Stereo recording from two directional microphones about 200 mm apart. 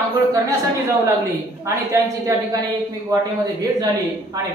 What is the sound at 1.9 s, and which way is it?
Speech, 15° right (ahead or behind).